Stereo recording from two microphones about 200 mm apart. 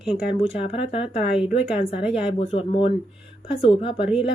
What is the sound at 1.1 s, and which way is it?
Speech, 5° right (ahead or behind).